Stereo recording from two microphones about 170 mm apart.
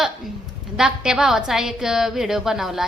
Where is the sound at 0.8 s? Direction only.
5° right (ahead or behind).